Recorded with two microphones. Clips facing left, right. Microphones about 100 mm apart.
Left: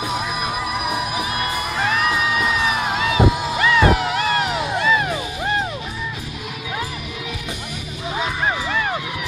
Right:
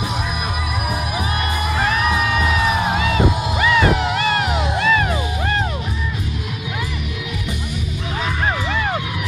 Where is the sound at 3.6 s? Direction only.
5° right (ahead or behind).